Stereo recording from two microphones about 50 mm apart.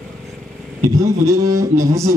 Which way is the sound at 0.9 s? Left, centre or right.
Right.